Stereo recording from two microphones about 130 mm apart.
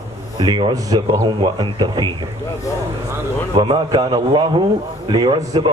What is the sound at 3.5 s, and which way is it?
A man's voice, 40° right (ahead or behind).